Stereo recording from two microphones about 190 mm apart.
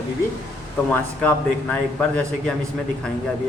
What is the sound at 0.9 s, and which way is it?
A man's voice, 10° left (ahead or behind).